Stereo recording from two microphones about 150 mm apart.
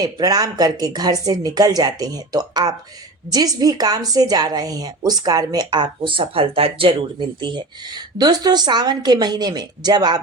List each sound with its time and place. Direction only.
0.0 s a woman's voice: 25° right (ahead or behind)